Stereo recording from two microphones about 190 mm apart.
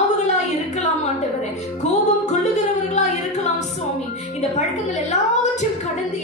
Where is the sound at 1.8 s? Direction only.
40° left (ahead or behind).